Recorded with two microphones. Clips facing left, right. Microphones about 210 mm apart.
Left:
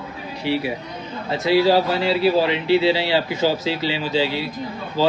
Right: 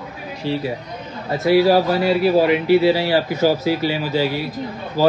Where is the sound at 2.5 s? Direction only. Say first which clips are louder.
Right 3 dB; 25° left (ahead or behind).